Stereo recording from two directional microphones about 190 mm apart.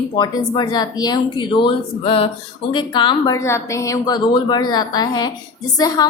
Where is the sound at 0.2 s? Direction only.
25° left (ahead or behind).